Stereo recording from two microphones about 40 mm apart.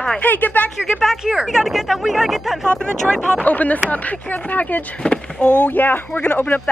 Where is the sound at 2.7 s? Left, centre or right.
Left.